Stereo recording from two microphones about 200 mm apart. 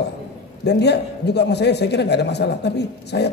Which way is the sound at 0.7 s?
60° left (ahead or behind).